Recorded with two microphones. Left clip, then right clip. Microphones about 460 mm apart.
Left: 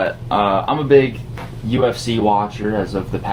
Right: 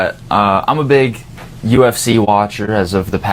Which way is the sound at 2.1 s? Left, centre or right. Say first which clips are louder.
Right 5 dB; right.